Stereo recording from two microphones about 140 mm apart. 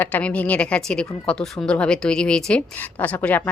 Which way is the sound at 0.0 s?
10° left (ahead or behind).